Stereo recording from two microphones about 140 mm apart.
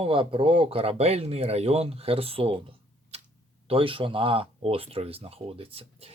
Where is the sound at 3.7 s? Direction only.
40° right (ahead or behind).